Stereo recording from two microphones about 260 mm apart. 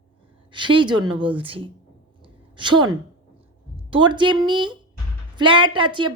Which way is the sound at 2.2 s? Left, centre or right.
Centre.